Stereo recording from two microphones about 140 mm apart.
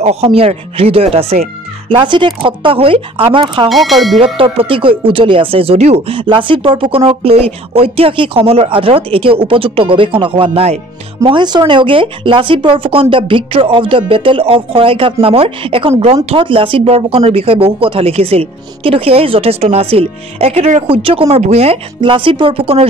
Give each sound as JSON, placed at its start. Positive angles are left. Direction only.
{"t": 0.0, "sound": "speech", "side_deg": -50}
{"t": 3.6, "sound": "speech", "side_deg": 0}
{"t": 4.2, "sound": "speech", "side_deg": -40}
{"t": 11.2, "sound": "speech", "side_deg": -35}